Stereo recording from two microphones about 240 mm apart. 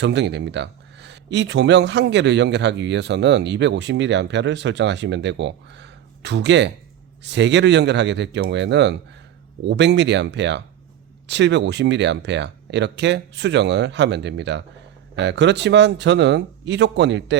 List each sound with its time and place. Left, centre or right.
0.0 s speech: right